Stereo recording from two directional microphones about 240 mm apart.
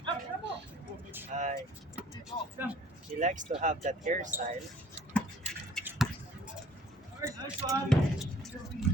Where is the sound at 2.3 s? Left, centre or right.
Left.